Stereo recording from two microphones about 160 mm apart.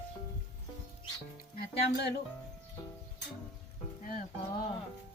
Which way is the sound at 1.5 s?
80° left.